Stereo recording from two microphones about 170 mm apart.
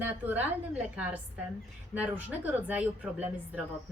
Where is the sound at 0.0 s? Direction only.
10° right (ahead or behind).